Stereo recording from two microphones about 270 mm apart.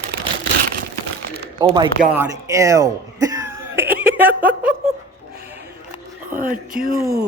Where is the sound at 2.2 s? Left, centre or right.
Centre.